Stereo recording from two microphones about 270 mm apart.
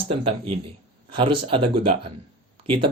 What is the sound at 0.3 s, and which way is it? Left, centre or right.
Speech, centre.